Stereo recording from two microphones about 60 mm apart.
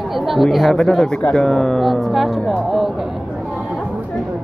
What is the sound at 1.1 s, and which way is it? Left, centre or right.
Speech, centre.